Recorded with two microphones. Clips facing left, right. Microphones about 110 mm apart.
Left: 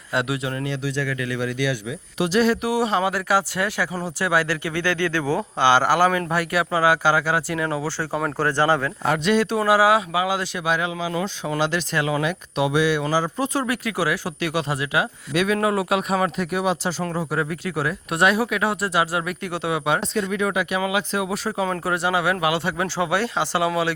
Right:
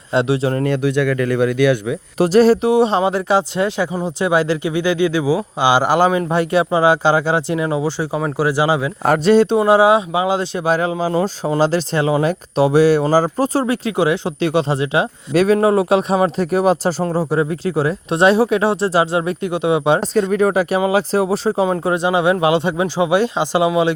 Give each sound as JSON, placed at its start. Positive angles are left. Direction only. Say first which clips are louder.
{"t": 0.1, "sound": "speech", "louder": "right 8 dB", "side_deg": -30}
{"t": 0.5, "sound": "speech", "louder": "right 9 dB", "side_deg": -50}
{"t": 9.0, "sound": "speech", "louder": "right 8 dB", "side_deg": -40}
{"t": 17.0, "sound": "speech", "louder": "right 7 dB", "side_deg": -30}
{"t": 20.3, "sound": "speech", "louder": "right 8 dB", "side_deg": -40}